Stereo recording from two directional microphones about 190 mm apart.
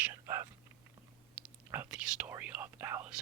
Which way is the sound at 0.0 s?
15° right (ahead or behind).